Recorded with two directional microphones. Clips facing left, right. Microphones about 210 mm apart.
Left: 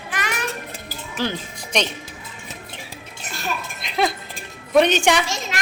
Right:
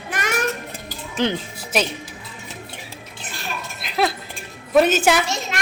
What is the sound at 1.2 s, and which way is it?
Speech, 20° right (ahead or behind).